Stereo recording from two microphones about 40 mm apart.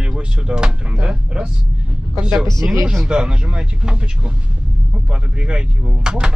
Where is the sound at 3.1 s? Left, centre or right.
Right.